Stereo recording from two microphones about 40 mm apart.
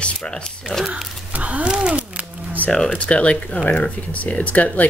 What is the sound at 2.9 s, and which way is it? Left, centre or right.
Speech, left.